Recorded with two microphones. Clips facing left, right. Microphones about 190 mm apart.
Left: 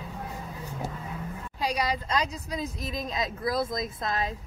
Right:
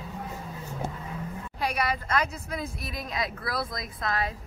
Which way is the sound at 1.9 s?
15° left (ahead or behind).